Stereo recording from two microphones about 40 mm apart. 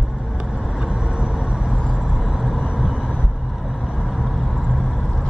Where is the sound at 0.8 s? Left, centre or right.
Right.